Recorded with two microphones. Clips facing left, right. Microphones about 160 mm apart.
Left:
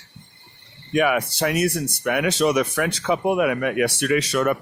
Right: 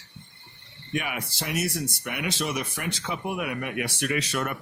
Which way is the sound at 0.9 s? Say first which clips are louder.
Left 11 dB; 70° left (ahead or behind).